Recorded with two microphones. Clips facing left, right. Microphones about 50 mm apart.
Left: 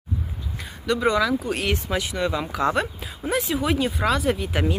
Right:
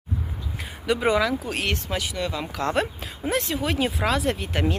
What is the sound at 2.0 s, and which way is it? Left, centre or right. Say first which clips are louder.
Speech: left 3 dB; centre.